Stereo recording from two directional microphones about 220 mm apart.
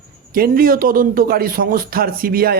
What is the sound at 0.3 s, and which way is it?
A man's voice, 40° right (ahead or behind).